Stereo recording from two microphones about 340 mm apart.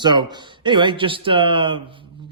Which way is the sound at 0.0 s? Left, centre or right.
Centre.